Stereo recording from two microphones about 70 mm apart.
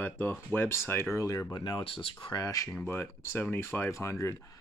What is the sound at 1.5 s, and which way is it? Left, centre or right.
Speech, left.